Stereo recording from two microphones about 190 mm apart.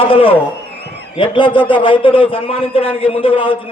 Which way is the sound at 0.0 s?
30° left (ahead or behind).